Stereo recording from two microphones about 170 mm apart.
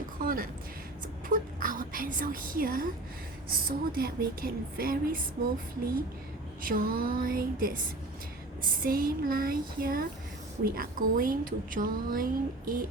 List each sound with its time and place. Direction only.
0.3 s a woman's voice: 55° right (ahead or behind)
6.6 s a woman's voice: 55° right (ahead or behind)
8.8 s a woman's voice: 60° right (ahead or behind)